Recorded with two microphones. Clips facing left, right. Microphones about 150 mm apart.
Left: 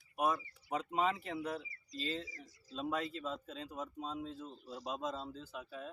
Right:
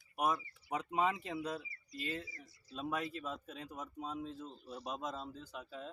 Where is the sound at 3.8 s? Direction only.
20° left (ahead or behind).